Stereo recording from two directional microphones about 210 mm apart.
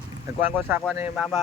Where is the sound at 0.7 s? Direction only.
10° right (ahead or behind).